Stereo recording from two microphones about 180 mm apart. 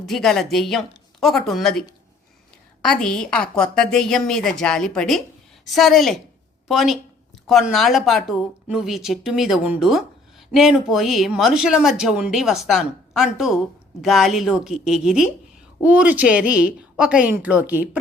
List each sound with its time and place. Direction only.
0.0 s speech: centre (ahead or behind)
2.8 s a woman's voice: 5° left (ahead or behind)